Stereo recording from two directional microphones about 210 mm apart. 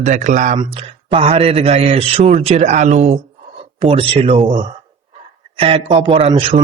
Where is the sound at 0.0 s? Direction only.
35° right (ahead or behind).